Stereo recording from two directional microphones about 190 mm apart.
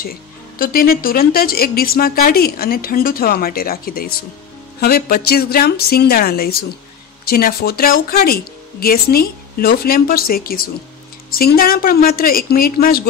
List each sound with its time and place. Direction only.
0.6 s speech: 50° left (ahead or behind)